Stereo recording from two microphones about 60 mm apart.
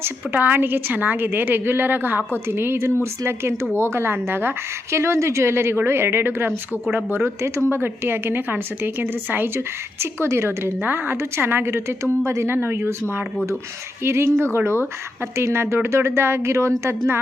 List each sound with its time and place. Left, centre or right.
0.0 s a woman's voice: right